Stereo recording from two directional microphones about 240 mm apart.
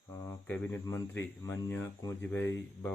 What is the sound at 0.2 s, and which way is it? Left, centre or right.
Speech, centre.